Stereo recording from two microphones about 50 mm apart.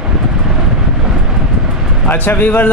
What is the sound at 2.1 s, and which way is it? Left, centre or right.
Speech, left.